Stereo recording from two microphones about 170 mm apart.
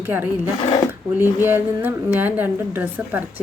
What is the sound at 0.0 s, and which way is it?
Speech, 10° right (ahead or behind).